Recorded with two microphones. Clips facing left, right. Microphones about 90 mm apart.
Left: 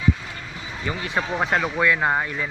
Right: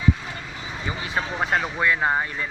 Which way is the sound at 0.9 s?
5° right (ahead or behind).